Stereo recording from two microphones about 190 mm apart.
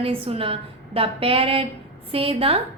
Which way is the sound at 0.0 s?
30° right (ahead or behind).